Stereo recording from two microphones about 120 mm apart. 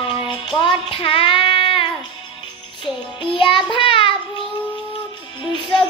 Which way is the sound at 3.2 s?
45° left (ahead or behind).